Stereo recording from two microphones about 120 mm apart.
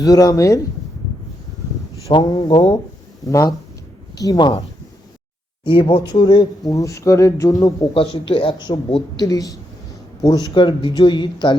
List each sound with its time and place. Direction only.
0.0 s speech: 30° left (ahead or behind)
2.1 s speech: 35° left (ahead or behind)
3.2 s speech: 25° left (ahead or behind)
5.6 s speech: 45° left (ahead or behind); by 7.7 s 30° left (ahead or behind)
7.9 s speech: 50° left (ahead or behind); by 10.4 s 30° left (ahead or behind)
10.5 s speech: 40° left (ahead or behind)